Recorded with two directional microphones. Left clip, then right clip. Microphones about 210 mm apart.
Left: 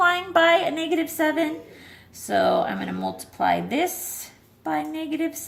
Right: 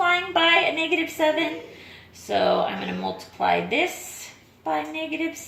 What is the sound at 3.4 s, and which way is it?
A woman's voice, 40° left (ahead or behind).